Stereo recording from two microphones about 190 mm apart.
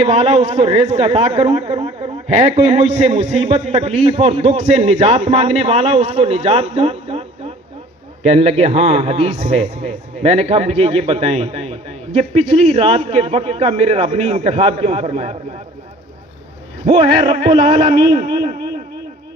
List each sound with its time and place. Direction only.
0.0 s a man's voice: 30° right (ahead or behind)
16.8 s a man's voice: 30° right (ahead or behind)